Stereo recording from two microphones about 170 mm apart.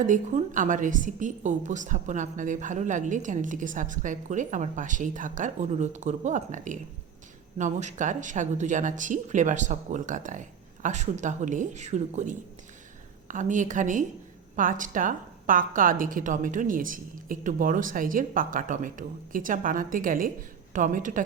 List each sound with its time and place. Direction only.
0.0 s a woman's voice: 50° right (ahead or behind)